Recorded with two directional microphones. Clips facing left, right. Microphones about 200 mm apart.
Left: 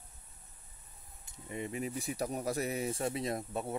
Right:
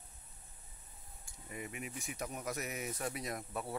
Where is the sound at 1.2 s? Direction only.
25° left (ahead or behind).